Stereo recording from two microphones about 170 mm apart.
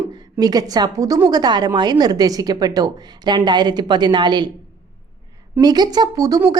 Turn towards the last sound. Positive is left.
turn(degrees=-20)  # may be behind; listen again after turning